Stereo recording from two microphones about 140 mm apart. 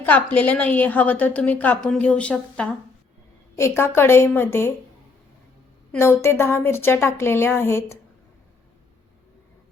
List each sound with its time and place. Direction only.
0.0 s a woman's voice: 10° left (ahead or behind)
3.6 s a woman's voice: 20° left (ahead or behind)
5.9 s a woman's voice: 15° left (ahead or behind)